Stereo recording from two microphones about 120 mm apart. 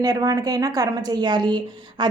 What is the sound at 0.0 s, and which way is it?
A woman's voice, 30° right (ahead or behind).